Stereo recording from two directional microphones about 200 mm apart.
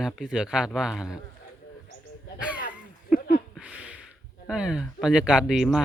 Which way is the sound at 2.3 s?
5° right (ahead or behind).